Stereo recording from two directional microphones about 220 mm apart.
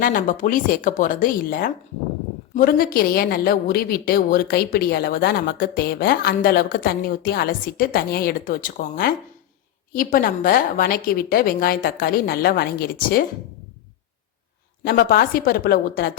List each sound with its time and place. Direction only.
0.0 s a woman's voice: 40° left (ahead or behind)
14.8 s a woman's voice: 40° left (ahead or behind)